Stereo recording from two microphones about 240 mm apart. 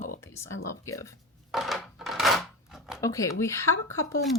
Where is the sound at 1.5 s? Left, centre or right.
Centre.